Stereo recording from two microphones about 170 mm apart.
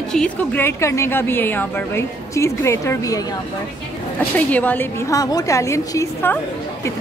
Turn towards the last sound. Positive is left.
turn(degrees=15)  # may be behind; listen again after turning